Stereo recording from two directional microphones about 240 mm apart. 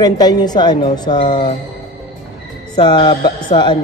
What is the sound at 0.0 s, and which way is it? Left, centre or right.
Speech, centre.